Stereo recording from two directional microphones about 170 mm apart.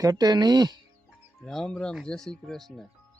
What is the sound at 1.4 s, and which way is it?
Speech, 5° left (ahead or behind).